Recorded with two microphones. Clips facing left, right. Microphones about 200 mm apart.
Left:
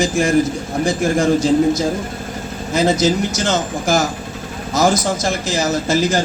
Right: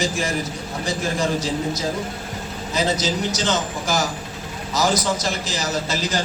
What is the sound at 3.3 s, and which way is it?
Speech, 50° left (ahead or behind).